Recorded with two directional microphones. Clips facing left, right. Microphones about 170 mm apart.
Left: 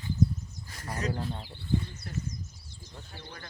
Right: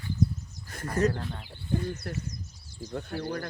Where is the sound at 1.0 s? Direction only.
50° right (ahead or behind).